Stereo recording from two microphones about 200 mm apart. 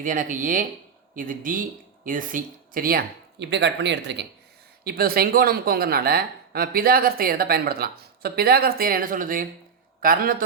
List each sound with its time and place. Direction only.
0.0 s a woman's voice: 40° right (ahead or behind)
3.4 s speech: 60° right (ahead or behind)
4.8 s a woman's voice: 50° right (ahead or behind)